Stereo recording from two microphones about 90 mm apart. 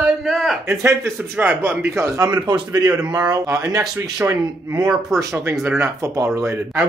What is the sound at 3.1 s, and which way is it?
A man's voice, 40° right (ahead or behind).